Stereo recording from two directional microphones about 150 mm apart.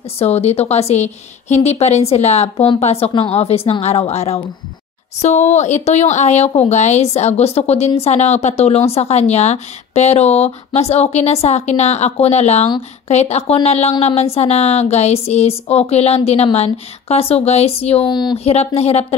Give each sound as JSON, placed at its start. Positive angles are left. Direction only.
{"t": 0.2, "sound": "speech", "side_deg": 45}
{"t": 18.1, "sound": "speech", "side_deg": 30}
{"t": 18.4, "sound": "speech", "side_deg": 45}